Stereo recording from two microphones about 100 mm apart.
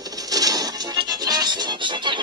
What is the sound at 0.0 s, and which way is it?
Music, 40° right (ahead or behind).